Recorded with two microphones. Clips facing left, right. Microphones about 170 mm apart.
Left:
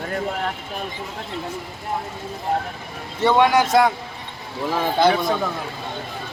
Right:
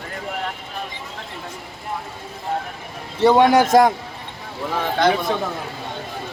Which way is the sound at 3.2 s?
35° right (ahead or behind).